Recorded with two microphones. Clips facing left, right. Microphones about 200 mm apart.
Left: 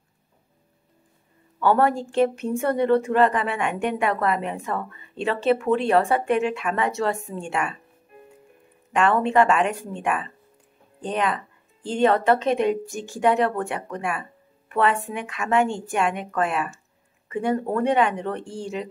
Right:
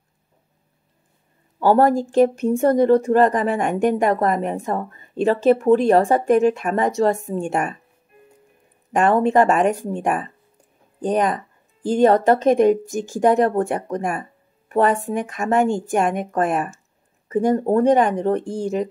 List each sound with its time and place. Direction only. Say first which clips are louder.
1.6 s a woman's voice: right 4 dB; 40° right (ahead or behind)
8.9 s a woman's voice: right 3 dB; 40° right (ahead or behind)